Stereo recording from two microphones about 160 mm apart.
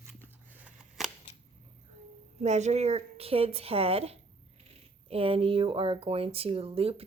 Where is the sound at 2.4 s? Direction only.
45° right (ahead or behind).